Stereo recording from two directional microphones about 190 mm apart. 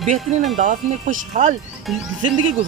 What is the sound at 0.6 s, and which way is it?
Speech, 45° right (ahead or behind).